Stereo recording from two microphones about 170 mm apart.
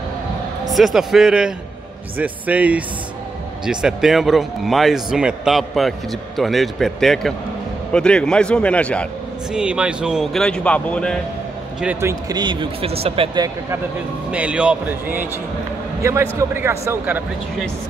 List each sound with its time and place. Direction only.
0.7 s a man's voice: centre (ahead or behind)
9.5 s speech: 5° right (ahead or behind)
11.8 s speech: 10° right (ahead or behind); by 13.5 s 30° right (ahead or behind)
14.3 s a man's voice: 5° right (ahead or behind)